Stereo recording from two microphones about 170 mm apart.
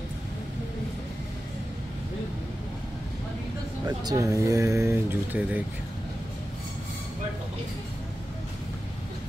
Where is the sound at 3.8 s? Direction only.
20° right (ahead or behind).